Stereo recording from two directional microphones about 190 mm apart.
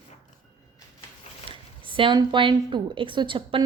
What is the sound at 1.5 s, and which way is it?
Speech, 25° right (ahead or behind).